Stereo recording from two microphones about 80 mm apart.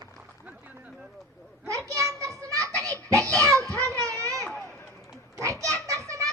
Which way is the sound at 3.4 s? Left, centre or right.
Right.